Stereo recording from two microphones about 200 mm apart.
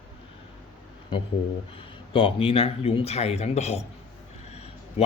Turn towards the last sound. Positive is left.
turn(degrees=30)  # may be behind; listen again after turning